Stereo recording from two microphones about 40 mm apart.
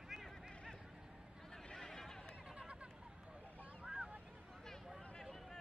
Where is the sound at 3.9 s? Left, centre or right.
Right.